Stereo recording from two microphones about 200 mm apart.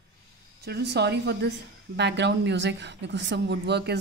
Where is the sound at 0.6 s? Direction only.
55° right (ahead or behind).